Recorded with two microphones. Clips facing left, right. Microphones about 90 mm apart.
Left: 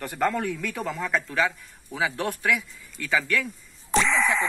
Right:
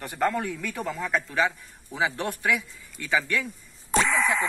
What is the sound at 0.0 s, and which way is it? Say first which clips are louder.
Speech: left 1 dB; 10° right (ahead or behind).